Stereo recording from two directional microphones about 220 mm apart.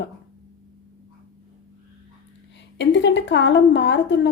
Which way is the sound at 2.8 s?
55° left (ahead or behind).